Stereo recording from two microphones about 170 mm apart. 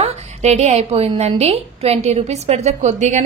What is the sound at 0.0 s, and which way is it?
A woman's voice, 40° right (ahead or behind).